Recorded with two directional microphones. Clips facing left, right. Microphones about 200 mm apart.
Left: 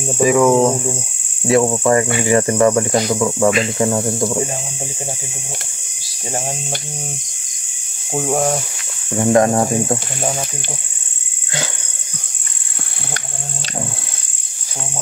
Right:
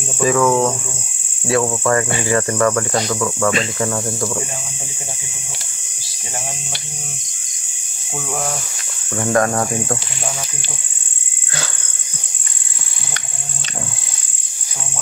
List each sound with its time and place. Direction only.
0.2 s cricket: 15° left (ahead or behind)
8.1 s speech: 40° left (ahead or behind)
9.1 s cricket: 20° left (ahead or behind)